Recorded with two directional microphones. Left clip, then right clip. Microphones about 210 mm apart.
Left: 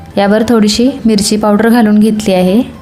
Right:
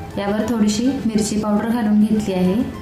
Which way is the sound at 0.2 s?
45° left (ahead or behind).